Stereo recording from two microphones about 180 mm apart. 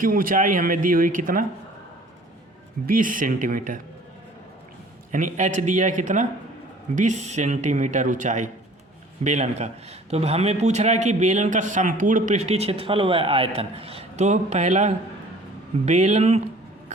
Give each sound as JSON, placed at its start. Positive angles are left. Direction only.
{"t": 0.0, "sound": "speech", "side_deg": -50}
{"t": 2.8, "sound": "speech", "side_deg": -50}
{"t": 5.1, "sound": "a man's voice", "side_deg": -45}